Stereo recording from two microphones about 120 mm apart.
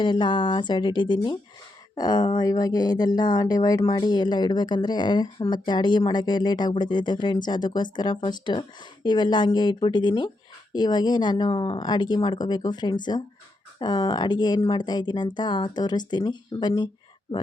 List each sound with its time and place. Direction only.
0.0 s speech: 40° left (ahead or behind)